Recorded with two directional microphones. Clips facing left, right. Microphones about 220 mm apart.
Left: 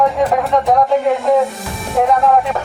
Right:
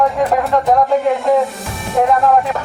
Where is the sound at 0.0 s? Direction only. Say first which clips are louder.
Even; centre (ahead or behind).